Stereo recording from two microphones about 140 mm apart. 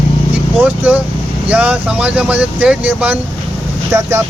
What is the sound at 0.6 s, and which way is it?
Speech, 10° right (ahead or behind).